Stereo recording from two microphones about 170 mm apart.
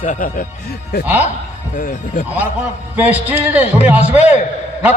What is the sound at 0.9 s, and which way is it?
Speech, 65° left (ahead or behind).